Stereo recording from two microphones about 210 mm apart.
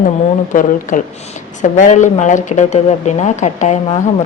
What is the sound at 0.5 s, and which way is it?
A woman's voice, 40° left (ahead or behind).